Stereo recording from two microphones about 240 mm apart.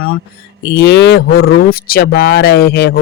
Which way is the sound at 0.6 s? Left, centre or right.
Left.